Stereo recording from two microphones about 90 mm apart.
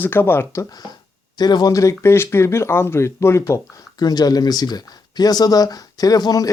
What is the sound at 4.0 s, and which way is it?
Speech, 50° left (ahead or behind).